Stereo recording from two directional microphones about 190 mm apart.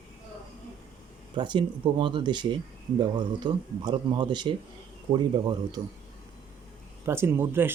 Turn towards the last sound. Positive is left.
turn(degrees=-10)  # may be behind; listen again after turning